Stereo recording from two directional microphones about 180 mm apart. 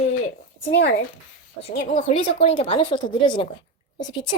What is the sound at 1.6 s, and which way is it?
A woman's voice, 35° left (ahead or behind).